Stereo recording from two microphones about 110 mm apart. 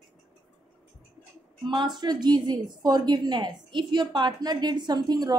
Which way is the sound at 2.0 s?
40° right (ahead or behind).